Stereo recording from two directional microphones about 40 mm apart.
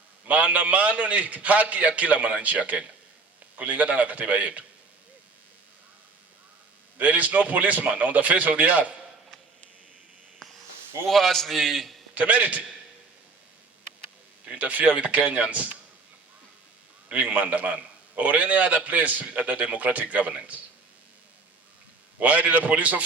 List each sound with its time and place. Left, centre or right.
0.3 s a man's voice: right
7.0 s a man's voice: right
11.0 s a man's voice: centre
12.1 s a man's voice: right
14.4 s a man's voice: right
17.1 s a man's voice: right
22.2 s a man's voice: right